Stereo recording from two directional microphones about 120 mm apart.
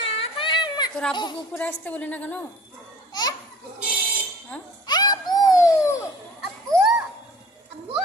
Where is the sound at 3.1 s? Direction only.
35° left (ahead or behind).